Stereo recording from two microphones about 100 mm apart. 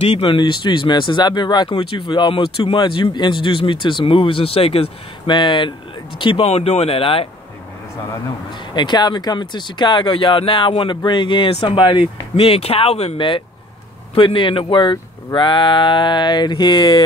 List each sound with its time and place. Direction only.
0.0 s speech: 80° left; by 1.7 s 45° left (ahead or behind)
1.7 s speech: 65° left (ahead or behind)
5.3 s speech: 50° left (ahead or behind)
6.4 s speech: 90° left; by 7.2 s 70° left (ahead or behind)
8.5 s speech: 50° left (ahead or behind); by 13.1 s 80° left
14.1 s speech: 60° left (ahead or behind)